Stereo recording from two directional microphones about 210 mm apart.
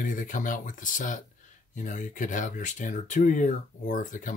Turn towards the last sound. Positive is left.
turn(degrees=40)  # may be behind; listen again after turning